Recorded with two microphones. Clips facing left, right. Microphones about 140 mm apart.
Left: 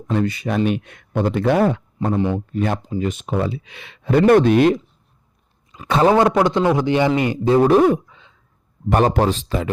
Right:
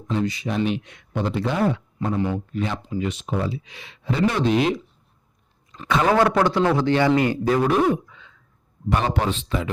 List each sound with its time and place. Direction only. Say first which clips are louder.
0.1 s speech: left 4 dB; 60° left (ahead or behind)
2.1 s speech: left 4 dB; 25° left (ahead or behind)
2.6 s speech: left 5 dB; 50° left (ahead or behind)
5.7 s a man's voice: left 4 dB; 10° left (ahead or behind); by 8.4 s 25° left (ahead or behind)
8.9 s speech: left 6 dB; 45° left (ahead or behind)